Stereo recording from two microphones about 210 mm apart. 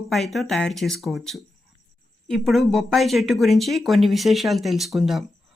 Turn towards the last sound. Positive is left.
turn(degrees=0)  # may be behind; listen again after turning